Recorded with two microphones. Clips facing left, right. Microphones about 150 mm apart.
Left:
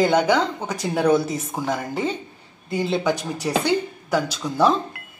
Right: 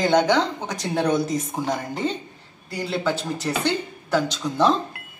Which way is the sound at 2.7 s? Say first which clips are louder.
Left 3 dB; 20° left (ahead or behind).